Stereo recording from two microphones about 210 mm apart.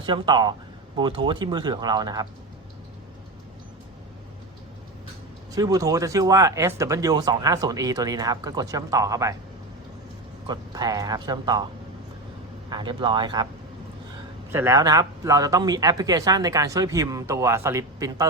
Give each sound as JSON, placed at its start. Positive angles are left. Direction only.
{"t": 0.0, "sound": "speech", "side_deg": -20}
{"t": 5.5, "sound": "speech", "side_deg": -15}
{"t": 10.4, "sound": "speech", "side_deg": -20}
{"t": 12.7, "sound": "speech", "side_deg": -20}
{"t": 14.5, "sound": "speech", "side_deg": -15}